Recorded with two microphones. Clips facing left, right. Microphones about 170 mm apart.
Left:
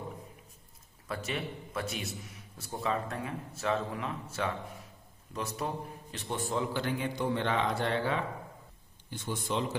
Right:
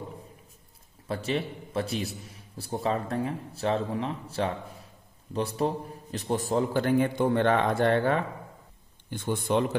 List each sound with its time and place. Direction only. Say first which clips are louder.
1.0 s a man's voice: right 6 dB; 30° right (ahead or behind); by 9.8 s 55° right (ahead or behind)